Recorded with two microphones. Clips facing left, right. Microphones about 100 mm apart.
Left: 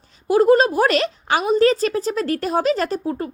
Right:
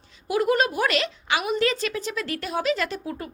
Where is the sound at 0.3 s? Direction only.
35° left (ahead or behind).